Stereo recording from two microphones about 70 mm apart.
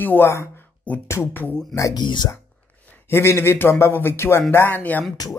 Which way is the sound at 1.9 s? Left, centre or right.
Left.